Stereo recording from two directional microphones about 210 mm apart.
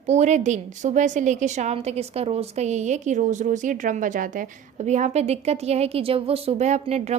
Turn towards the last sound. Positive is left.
turn(degrees=-30)  # may be behind; listen again after turning